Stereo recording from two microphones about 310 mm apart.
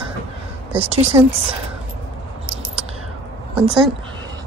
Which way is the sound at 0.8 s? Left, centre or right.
Centre.